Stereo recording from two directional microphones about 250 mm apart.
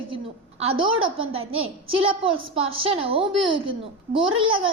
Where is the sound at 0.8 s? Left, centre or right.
Right.